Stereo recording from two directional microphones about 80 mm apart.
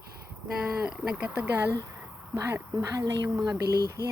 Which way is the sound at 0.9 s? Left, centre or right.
Centre.